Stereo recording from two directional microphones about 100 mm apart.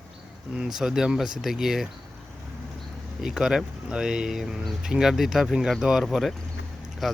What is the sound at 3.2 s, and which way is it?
Speech, 5° right (ahead or behind).